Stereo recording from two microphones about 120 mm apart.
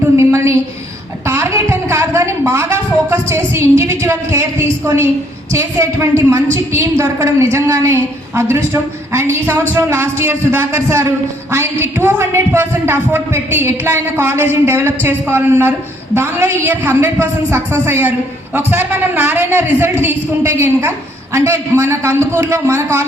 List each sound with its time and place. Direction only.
0.2 s a sound: 25° right (ahead or behind)
1.3 s speech: 25° right (ahead or behind)
5.5 s a woman's voice: 25° right (ahead or behind)